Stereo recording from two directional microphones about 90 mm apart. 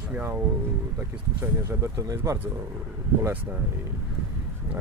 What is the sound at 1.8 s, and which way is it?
Speech, 35° right (ahead or behind).